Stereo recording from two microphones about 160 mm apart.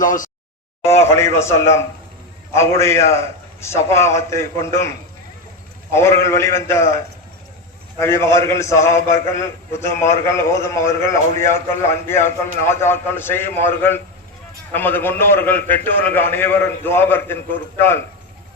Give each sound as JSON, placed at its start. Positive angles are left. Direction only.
{"t": 0.0, "sound": "a sound", "side_deg": 55}
{"t": 0.9, "sound": "a man's voice", "side_deg": 15}
{"t": 5.9, "sound": "a man's voice", "side_deg": 15}